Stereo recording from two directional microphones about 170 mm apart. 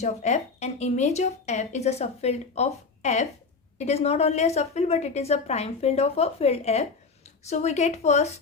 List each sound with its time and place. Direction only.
0.0 s a woman's voice: 40° left (ahead or behind)